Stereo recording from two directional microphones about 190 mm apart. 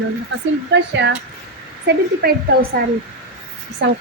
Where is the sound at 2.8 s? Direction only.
50° right (ahead or behind).